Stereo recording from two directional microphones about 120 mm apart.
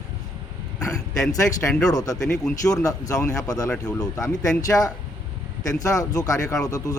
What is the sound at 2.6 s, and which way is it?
Speech, 30° left (ahead or behind).